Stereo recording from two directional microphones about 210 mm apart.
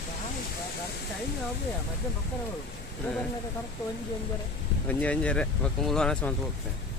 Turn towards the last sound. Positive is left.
turn(degrees=5)  # may be behind; listen again after turning